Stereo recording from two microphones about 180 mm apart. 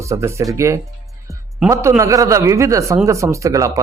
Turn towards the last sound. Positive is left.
turn(degrees=-15)  # may be behind; listen again after turning